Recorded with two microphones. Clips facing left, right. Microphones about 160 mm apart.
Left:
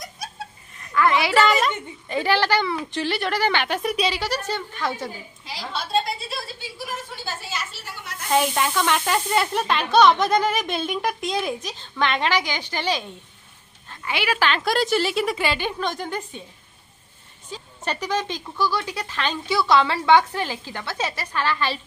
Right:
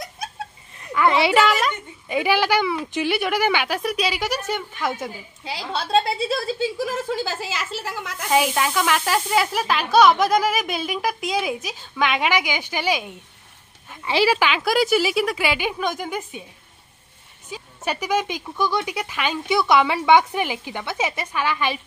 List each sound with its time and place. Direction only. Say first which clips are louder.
0.9 s a woman's voice: right 2 dB; 25° right (ahead or behind)
1.5 s a child's voice: left 1 dB; centre (ahead or behind)
2.1 s speech: right 1 dB; 10° right (ahead or behind)
5.4 s a woman's voice: right 4 dB; 75° right (ahead or behind)
7.1 s a woman's voice: right 7 dB; 90° right
8.3 s speech: right 1 dB; 5° right (ahead or behind)
14.0 s speech: right 6 dB; 30° right (ahead or behind)
14.4 s speech: right 2 dB; 5° right (ahead or behind)
17.5 s speech: right 2 dB; 10° right (ahead or behind)